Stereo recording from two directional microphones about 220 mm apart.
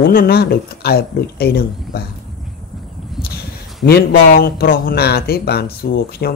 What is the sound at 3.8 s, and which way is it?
Speech, 45° left (ahead or behind).